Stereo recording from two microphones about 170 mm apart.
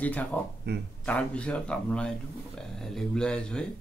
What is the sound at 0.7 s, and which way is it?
Speech, 80° right.